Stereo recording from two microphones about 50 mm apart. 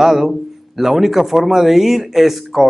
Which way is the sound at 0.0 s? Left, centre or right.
Centre.